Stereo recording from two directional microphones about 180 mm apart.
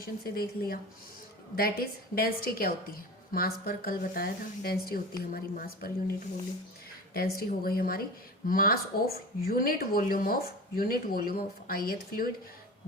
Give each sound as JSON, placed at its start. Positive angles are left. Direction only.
{"t": 0.0, "sound": "a woman's voice", "side_deg": 55}
{"t": 7.1, "sound": "a woman's voice", "side_deg": 55}